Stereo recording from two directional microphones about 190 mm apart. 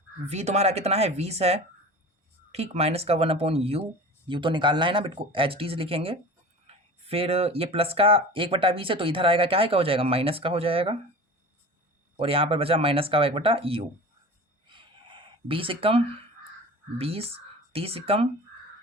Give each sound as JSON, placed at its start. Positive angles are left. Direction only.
{"t": 0.3, "sound": "speech", "side_deg": -35}
{"t": 12.1, "sound": "speech", "side_deg": -30}
{"t": 14.7, "sound": "a sound", "side_deg": -25}
{"t": 17.0, "sound": "speech", "side_deg": -30}